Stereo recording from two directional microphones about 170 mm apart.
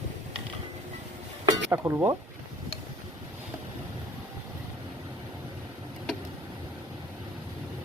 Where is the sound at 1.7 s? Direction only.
15° right (ahead or behind).